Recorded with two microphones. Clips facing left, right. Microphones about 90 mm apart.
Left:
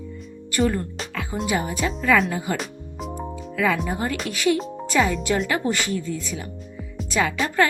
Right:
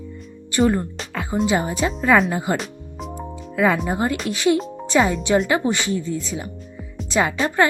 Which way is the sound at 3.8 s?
30° right (ahead or behind).